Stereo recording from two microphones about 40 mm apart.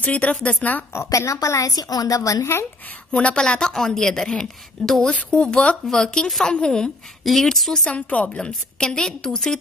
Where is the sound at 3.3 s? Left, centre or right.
Centre.